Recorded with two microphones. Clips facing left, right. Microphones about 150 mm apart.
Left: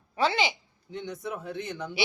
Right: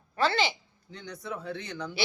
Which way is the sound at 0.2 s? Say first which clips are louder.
Left 1 dB; 15° left (ahead or behind).